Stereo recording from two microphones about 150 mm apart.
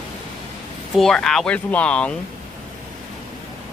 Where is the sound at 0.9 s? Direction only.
Centre (ahead or behind).